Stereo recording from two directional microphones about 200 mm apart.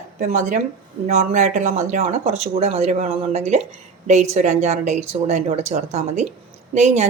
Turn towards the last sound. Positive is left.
turn(degrees=-35)  # may be behind; listen again after turning